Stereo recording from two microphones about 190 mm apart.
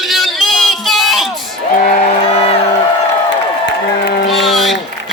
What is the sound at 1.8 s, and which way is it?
Speech, 45° left (ahead or behind).